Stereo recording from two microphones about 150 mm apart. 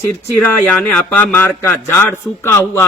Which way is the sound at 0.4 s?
10° left (ahead or behind).